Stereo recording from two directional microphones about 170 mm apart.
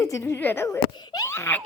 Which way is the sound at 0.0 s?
15° left (ahead or behind).